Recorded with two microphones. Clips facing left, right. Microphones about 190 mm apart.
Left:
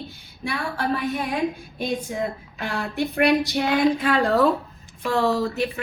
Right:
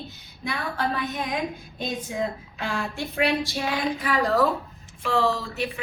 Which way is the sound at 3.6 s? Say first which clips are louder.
Left 7 dB; 65° left (ahead or behind).